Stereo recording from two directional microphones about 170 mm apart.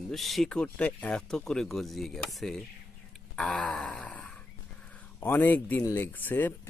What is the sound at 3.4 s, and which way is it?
Wail, 5° left (ahead or behind).